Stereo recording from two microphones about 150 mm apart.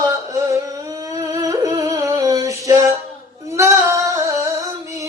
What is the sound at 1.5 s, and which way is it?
Music, 20° right (ahead or behind).